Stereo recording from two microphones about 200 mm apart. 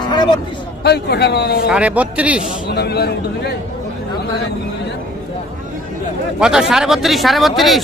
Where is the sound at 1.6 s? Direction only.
5° right (ahead or behind).